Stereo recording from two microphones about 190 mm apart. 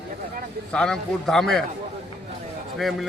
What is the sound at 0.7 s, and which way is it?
Speech, 5° left (ahead or behind).